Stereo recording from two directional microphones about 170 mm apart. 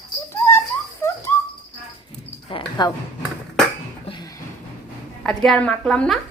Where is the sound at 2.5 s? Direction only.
25° left (ahead or behind).